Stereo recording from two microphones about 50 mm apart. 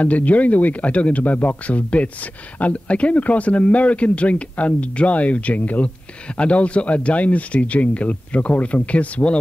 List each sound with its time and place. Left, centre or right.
0.0 s speech: left